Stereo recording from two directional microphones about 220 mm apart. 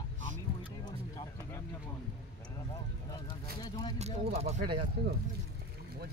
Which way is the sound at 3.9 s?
30° right (ahead or behind).